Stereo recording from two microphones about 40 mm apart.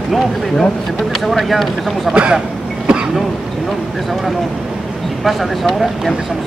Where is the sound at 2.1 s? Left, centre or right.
Right.